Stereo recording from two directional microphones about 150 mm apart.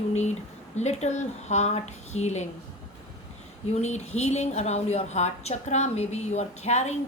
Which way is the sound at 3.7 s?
50° left (ahead or behind).